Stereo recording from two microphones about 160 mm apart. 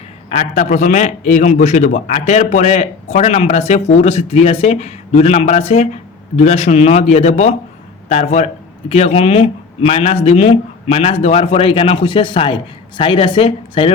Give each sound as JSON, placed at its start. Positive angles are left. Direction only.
{"t": 0.3, "sound": "a man's voice", "side_deg": 45}